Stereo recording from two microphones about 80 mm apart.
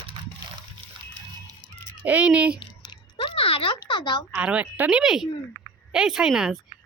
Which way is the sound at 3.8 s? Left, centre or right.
Left.